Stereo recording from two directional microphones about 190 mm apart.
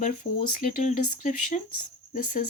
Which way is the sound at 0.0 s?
40° left (ahead or behind).